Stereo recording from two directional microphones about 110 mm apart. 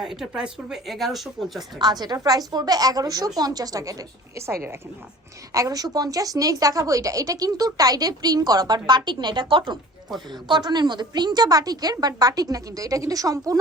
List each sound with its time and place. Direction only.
0.0 s speech: 5° right (ahead or behind)
1.8 s a woman's voice: 40° right (ahead or behind)